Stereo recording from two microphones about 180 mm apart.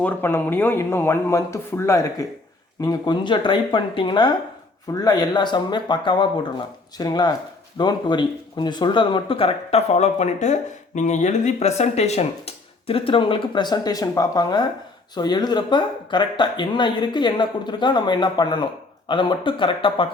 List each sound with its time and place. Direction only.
0.0 s speech: 10° left (ahead or behind); by 20.1 s 30° left (ahead or behind)